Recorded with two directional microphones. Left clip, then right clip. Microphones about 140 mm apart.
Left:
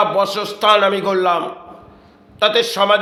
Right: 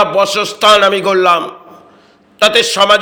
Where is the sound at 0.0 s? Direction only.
15° right (ahead or behind).